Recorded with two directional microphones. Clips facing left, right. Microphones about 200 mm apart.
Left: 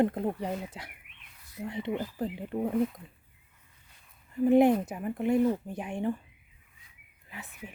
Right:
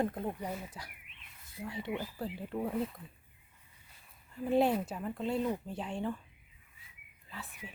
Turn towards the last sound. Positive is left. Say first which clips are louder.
# left 1 dB
turn(degrees=15)  # may be behind; listen again after turning